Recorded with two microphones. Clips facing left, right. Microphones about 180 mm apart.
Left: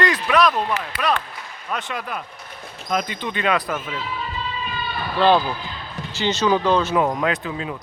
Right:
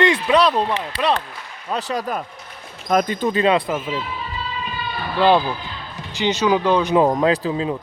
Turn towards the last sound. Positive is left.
turn(degrees=-30)  # may be behind; listen again after turning